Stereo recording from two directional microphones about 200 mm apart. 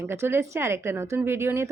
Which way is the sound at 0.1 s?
10° right (ahead or behind).